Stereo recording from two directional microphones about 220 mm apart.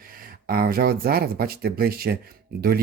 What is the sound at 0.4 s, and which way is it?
Speech, 45° right (ahead or behind).